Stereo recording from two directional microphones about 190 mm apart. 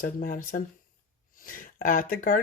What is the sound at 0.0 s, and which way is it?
A child's voice, 45° left (ahead or behind).